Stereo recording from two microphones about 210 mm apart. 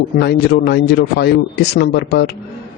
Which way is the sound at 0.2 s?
55° left (ahead or behind).